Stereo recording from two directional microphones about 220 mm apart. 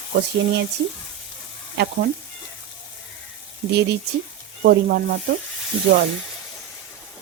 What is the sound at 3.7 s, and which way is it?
Speech, 50° right (ahead or behind).